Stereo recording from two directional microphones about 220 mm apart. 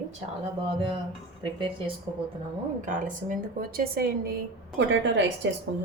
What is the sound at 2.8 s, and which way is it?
A woman's voice, 35° right (ahead or behind).